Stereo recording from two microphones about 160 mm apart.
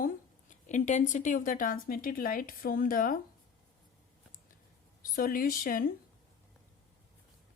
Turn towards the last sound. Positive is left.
turn(degrees=65)  # may be behind; listen again after turning